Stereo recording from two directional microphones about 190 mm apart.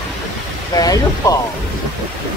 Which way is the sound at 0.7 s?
20° left (ahead or behind).